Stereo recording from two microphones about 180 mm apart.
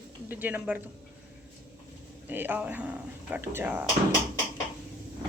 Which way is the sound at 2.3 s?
10° right (ahead or behind).